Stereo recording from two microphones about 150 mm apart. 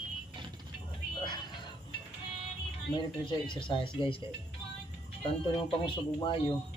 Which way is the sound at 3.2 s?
30° left (ahead or behind).